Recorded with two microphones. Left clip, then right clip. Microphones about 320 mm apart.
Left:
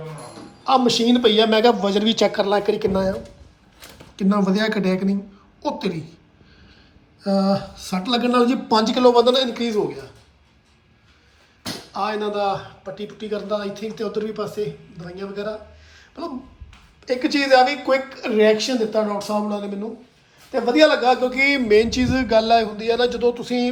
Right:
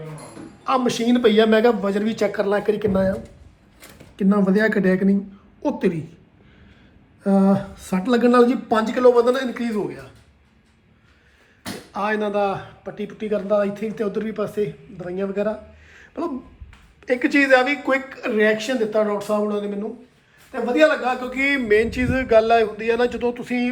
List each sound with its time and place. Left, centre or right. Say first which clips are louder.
0.6 s speech: left 3 dB; centre
7.4 s speech: right 1 dB; centre
11.9 s speech: right 1 dB; centre
20.8 s a man's voice: left 2 dB; left
21.4 s speech: left 1 dB; centre